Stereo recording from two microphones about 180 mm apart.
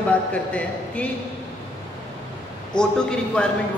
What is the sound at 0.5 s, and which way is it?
Speech, 5° left (ahead or behind).